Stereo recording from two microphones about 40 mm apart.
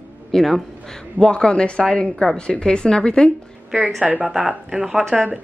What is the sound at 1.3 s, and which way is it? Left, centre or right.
A woman's voice, left.